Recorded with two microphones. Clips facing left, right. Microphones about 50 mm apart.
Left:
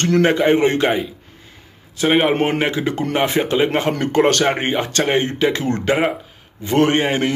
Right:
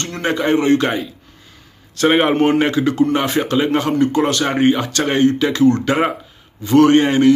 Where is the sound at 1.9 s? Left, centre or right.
Centre.